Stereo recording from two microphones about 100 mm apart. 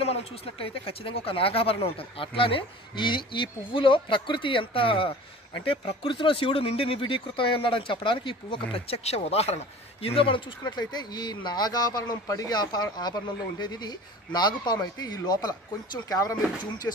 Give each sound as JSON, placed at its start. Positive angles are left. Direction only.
{"t": 0.0, "sound": "speech", "side_deg": 75}
{"t": 10.0, "sound": "speech", "side_deg": 65}
{"t": 10.6, "sound": "speech", "side_deg": 45}
{"t": 16.9, "sound": "speech", "side_deg": 25}